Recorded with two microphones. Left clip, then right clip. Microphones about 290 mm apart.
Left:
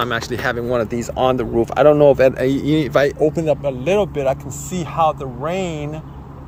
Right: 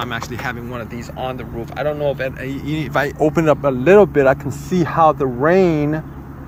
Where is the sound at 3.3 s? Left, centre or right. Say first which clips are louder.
Right 3 dB; centre.